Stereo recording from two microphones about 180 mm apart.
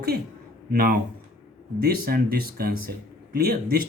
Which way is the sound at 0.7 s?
55° right (ahead or behind).